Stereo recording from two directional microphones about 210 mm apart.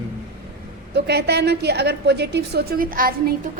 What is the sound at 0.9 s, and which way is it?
A woman's voice, 50° right (ahead or behind).